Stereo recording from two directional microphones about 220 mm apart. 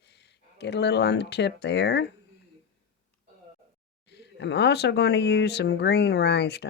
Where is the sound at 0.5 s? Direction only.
50° left (ahead or behind).